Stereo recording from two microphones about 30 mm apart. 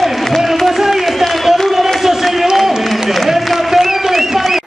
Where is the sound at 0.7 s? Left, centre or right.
Centre.